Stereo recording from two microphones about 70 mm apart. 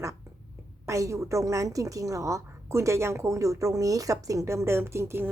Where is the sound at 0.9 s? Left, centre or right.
Right.